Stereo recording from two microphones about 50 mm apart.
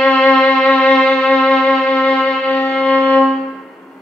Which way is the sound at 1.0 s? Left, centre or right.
Centre.